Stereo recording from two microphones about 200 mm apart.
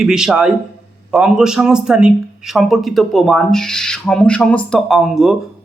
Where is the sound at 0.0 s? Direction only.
Centre (ahead or behind).